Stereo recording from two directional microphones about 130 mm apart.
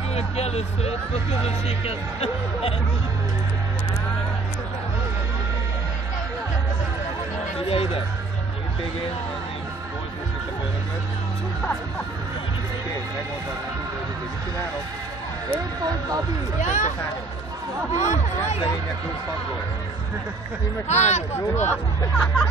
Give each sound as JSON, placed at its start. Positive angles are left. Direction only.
{"t": 0.1, "sound": "speech", "side_deg": 55}
{"t": 7.6, "sound": "speech", "side_deg": 50}
{"t": 16.6, "sound": "speech", "side_deg": 70}
{"t": 17.9, "sound": "speech", "side_deg": 65}
{"t": 20.9, "sound": "speech", "side_deg": 60}
{"t": 22.1, "sound": "speech", "side_deg": 5}